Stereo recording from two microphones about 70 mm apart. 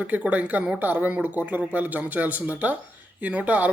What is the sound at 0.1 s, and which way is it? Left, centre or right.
Speech, right.